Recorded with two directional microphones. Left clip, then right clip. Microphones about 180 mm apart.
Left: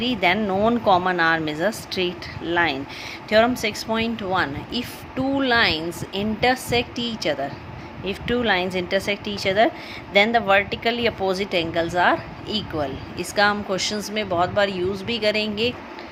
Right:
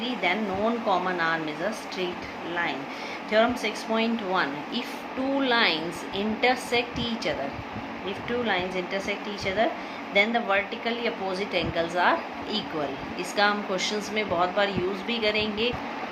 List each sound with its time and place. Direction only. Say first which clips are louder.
0.0 s speech: left 6 dB; 60° left (ahead or behind)
3.2 s speech: left 5 dB; 65° left (ahead or behind)